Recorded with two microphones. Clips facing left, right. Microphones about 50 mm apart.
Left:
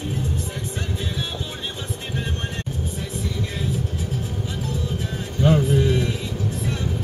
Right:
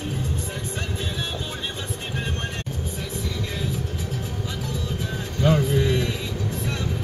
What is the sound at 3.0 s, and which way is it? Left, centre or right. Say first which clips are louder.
Music: left 2 dB; left.